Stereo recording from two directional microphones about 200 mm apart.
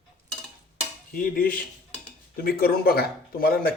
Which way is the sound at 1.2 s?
45° left (ahead or behind).